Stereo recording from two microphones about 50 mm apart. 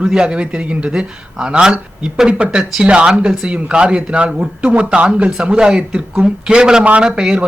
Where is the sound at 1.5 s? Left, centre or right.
Centre.